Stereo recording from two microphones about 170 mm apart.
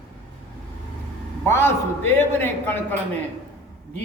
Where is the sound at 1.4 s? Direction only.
15° left (ahead or behind).